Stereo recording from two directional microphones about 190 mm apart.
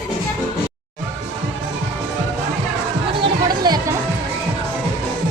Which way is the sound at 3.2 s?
20° right (ahead or behind).